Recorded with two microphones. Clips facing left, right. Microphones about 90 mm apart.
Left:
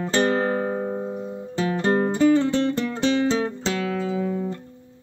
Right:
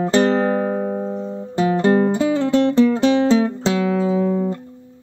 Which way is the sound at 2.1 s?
10° right (ahead or behind).